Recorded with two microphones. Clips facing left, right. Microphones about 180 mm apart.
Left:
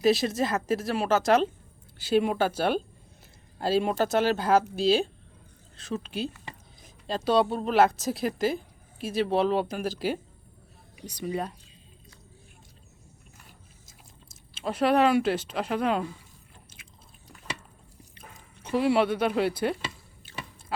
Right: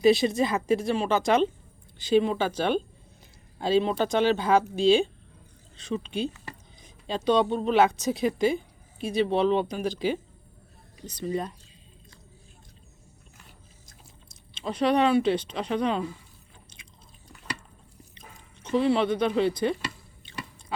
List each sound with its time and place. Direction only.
0.0 s a woman's voice: centre (ahead or behind)
14.5 s a woman's voice: 5° left (ahead or behind)
18.2 s speech: 10° left (ahead or behind)
20.3 s squish: 5° left (ahead or behind)